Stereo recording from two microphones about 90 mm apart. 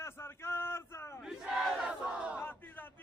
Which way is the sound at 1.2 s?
5° right (ahead or behind).